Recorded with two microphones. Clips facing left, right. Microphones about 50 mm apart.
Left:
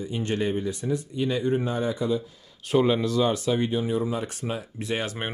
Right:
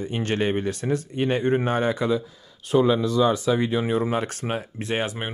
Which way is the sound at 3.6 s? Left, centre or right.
Right.